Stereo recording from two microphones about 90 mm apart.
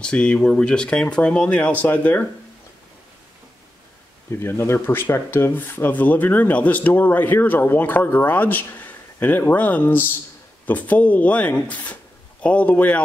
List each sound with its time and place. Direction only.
0.0 s speech: 10° left (ahead or behind)
4.3 s speech: 25° left (ahead or behind)